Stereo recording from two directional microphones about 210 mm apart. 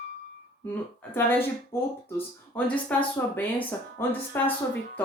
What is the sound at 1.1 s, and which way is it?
Speech, 10° left (ahead or behind).